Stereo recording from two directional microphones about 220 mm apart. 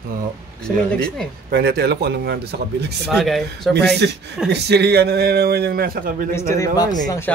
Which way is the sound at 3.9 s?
50° right (ahead or behind).